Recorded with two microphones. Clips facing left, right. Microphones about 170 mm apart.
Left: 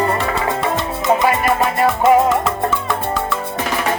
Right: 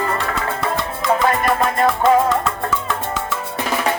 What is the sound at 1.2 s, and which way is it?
Music, 10° left (ahead or behind).